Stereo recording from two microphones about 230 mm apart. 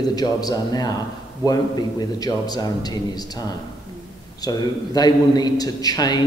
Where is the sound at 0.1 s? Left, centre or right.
Centre.